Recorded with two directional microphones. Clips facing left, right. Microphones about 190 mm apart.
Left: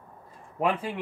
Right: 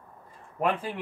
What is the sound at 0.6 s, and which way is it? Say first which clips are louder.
Speech: left 1 dB; 10° left (ahead or behind).